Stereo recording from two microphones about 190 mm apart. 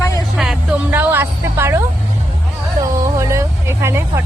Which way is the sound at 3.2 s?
15° right (ahead or behind).